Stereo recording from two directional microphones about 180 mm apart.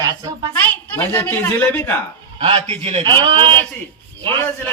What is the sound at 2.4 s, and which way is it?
A man's voice, 30° right (ahead or behind).